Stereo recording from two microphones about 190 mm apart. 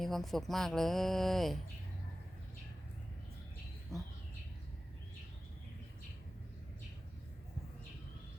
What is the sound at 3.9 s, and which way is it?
Speech, centre (ahead or behind).